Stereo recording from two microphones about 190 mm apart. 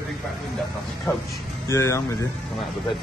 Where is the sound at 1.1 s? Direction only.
15° left (ahead or behind).